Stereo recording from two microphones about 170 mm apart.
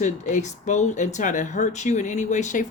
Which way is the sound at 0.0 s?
45° left (ahead or behind).